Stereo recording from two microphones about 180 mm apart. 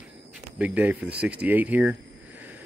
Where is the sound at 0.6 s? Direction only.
10° right (ahead or behind).